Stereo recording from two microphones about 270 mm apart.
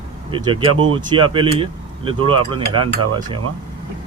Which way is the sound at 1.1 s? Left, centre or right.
Centre.